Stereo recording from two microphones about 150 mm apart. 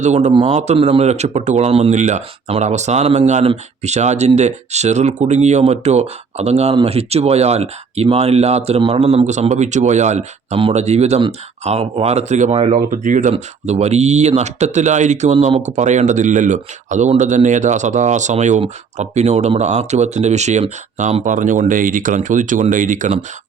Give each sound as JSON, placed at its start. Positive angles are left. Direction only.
{"t": 0.0, "sound": "speech", "side_deg": -50}
{"t": 12.9, "sound": "speech", "side_deg": -60}
{"t": 13.3, "sound": "speech", "side_deg": -45}